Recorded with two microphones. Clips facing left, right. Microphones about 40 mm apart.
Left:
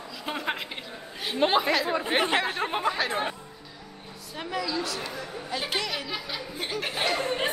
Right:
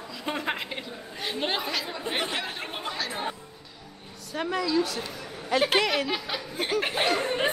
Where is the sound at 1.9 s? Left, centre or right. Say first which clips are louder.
Left 6 dB; left.